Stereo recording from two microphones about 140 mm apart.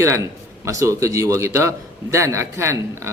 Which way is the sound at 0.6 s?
20° right (ahead or behind).